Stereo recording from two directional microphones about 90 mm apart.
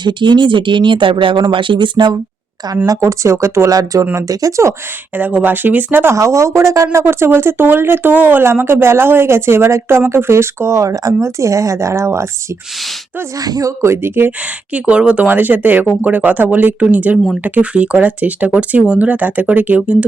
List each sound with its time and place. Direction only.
0.0 s speech: 60° right (ahead or behind)
2.6 s speech: 40° right (ahead or behind)
4.0 s speech: 20° right (ahead or behind)
4.3 s speech: 40° right (ahead or behind)
5.1 s speech: 20° right (ahead or behind)
6.1 s speech: 35° right (ahead or behind)
13.4 s speech: 40° right (ahead or behind); by 20.1 s 15° right (ahead or behind)